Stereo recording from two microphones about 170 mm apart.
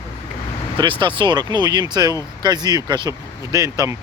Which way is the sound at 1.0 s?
30° right (ahead or behind).